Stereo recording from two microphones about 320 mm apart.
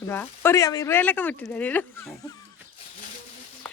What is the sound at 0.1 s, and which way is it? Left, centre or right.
Speech, centre.